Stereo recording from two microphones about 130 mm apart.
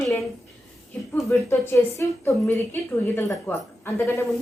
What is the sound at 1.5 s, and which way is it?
A woman's voice, 25° left (ahead or behind).